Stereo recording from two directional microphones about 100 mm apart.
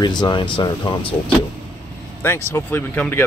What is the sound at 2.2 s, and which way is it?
Speech, 25° left (ahead or behind).